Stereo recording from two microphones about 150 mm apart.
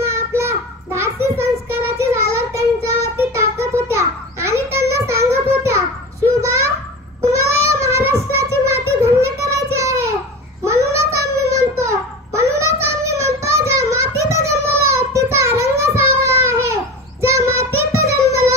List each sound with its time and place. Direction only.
0.0 s child singing: 20° right (ahead or behind)
3.9 s a sound: 20° right (ahead or behind)
7.2 s child singing: 20° right (ahead or behind)